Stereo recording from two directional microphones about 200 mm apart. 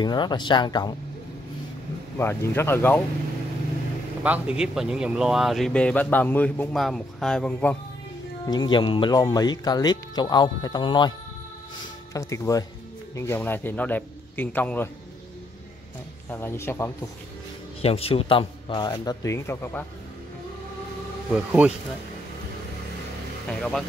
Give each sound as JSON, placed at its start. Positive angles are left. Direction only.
{"t": 0.0, "sound": "speech", "side_deg": 20}
{"t": 2.1, "sound": "a man's voice", "side_deg": 10}
{"t": 4.2, "sound": "speech", "side_deg": -5}
{"t": 8.5, "sound": "a man's voice", "side_deg": 20}
{"t": 16.3, "sound": "a man's voice", "side_deg": 10}
{"t": 17.8, "sound": "speech", "side_deg": 30}
{"t": 21.3, "sound": "speech", "side_deg": -5}